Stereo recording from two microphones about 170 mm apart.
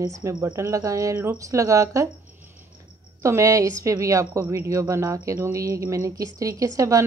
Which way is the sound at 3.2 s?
20° right (ahead or behind).